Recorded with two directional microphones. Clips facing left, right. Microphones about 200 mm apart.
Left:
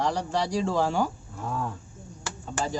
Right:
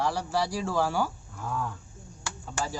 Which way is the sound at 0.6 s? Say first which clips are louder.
Left 2 dB; 20° left (ahead or behind).